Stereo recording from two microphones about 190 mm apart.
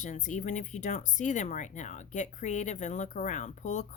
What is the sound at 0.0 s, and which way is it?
Speech, 40° left (ahead or behind).